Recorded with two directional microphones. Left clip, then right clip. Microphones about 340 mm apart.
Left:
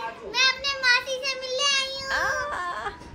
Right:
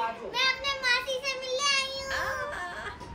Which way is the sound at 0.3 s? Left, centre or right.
Centre.